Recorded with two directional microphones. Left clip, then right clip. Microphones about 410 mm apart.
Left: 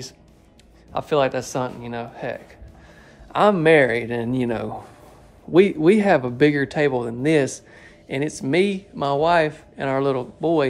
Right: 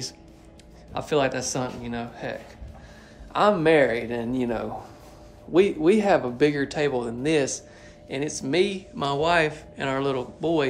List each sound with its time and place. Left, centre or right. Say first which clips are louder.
0.9 s speech: left 4 dB; centre
3.3 s speech: left 4 dB; centre